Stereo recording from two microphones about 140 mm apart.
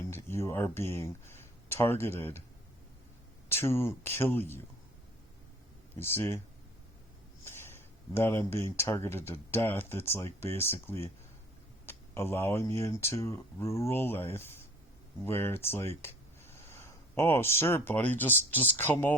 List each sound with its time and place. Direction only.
0.1 s speech: 20° left (ahead or behind)
3.5 s speech: 15° left (ahead or behind)
6.0 s speech: 15° left (ahead or behind)
7.4 s speech: 15° left (ahead or behind)